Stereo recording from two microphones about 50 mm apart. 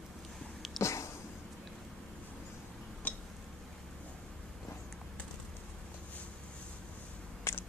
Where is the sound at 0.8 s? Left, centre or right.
Left.